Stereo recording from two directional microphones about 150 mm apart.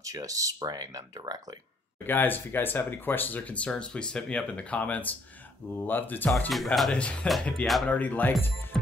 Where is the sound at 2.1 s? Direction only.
15° left (ahead or behind).